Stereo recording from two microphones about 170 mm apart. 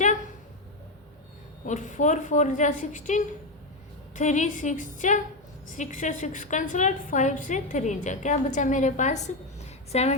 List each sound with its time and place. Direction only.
1.6 s a woman's voice: 45° left (ahead or behind)